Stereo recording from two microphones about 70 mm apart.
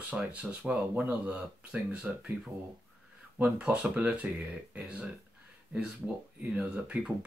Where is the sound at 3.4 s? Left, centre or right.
Centre.